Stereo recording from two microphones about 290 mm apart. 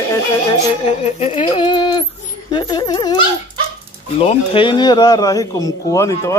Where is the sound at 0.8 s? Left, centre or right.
Left.